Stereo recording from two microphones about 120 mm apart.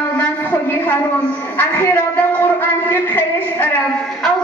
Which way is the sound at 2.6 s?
15° left (ahead or behind).